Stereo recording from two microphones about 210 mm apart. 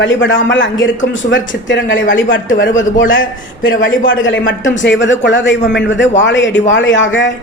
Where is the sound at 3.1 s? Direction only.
65° left (ahead or behind).